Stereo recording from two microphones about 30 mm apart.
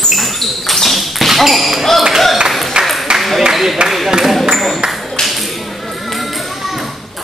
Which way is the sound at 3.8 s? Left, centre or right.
Right.